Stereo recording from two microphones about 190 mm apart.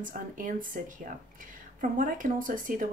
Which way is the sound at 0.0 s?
45° right (ahead or behind).